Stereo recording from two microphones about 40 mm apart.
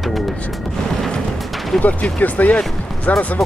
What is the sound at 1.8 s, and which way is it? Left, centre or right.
Speech, left.